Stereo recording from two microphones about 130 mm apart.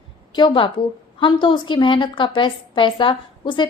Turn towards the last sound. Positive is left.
turn(degrees=40)  # may be behind; listen again after turning